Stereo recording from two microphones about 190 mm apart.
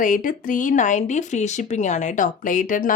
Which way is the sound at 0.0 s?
45° left (ahead or behind).